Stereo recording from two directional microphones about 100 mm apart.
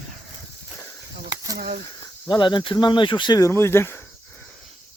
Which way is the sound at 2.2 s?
50° left (ahead or behind).